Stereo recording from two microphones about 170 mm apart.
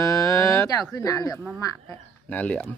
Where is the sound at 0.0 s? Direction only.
20° left (ahead or behind).